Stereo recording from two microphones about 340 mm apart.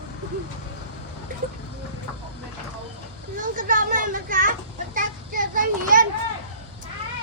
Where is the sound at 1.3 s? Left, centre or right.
Right.